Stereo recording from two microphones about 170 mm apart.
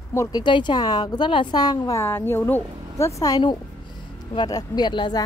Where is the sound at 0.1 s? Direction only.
20° left (ahead or behind).